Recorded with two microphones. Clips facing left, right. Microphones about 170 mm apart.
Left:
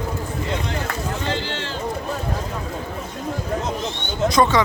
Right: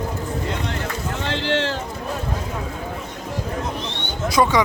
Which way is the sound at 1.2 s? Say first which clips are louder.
Right 4 dB; 75° right (ahead or behind).